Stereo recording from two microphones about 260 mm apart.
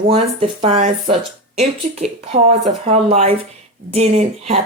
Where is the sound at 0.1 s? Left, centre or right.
Right.